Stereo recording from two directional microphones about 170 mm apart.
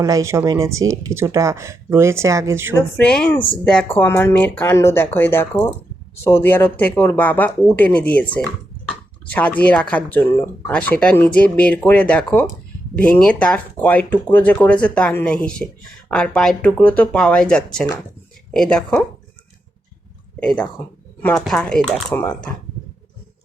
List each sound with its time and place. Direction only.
0.0 s speech: 20° right (ahead or behind)
2.7 s speech: 5° left (ahead or behind)
21.2 s speech: 10° left (ahead or behind)